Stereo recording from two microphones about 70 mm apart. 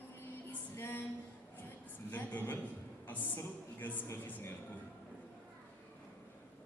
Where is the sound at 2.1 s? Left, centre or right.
Left.